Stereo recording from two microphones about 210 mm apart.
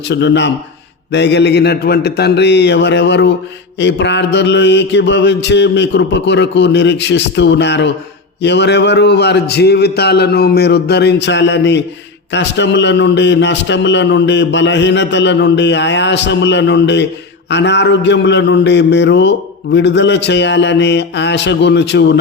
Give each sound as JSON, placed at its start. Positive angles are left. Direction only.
{"t": 0.1, "sound": "a man's voice", "side_deg": 55}